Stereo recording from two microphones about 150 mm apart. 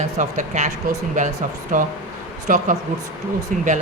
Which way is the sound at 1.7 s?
60° right (ahead or behind).